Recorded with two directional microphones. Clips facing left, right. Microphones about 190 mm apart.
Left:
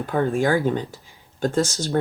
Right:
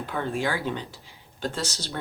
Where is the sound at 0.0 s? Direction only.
45° left (ahead or behind).